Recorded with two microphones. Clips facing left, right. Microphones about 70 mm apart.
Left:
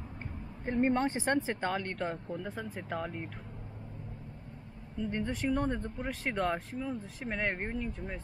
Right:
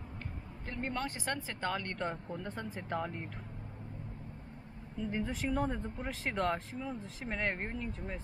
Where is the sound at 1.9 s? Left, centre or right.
Centre.